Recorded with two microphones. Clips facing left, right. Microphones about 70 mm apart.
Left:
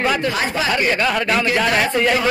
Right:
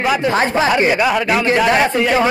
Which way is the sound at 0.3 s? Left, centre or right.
Right.